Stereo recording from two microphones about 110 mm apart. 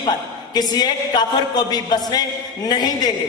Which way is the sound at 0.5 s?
40° left (ahead or behind).